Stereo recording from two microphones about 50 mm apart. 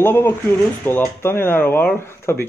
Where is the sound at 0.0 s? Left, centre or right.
Left.